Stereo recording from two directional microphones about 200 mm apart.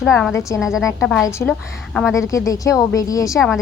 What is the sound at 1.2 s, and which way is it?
Speech, 15° left (ahead or behind).